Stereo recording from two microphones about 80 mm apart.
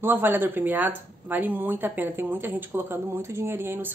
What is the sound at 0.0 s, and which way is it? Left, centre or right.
A woman's voice, right.